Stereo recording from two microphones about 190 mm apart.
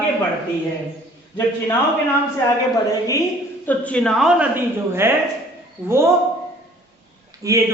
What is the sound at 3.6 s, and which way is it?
Speech, 10° left (ahead or behind).